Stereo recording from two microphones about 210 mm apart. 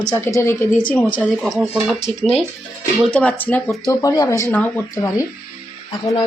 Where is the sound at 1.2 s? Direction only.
Centre (ahead or behind).